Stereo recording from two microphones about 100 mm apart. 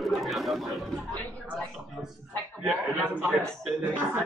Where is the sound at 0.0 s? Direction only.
Centre (ahead or behind).